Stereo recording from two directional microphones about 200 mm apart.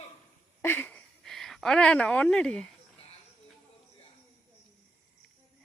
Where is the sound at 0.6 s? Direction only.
10° left (ahead or behind).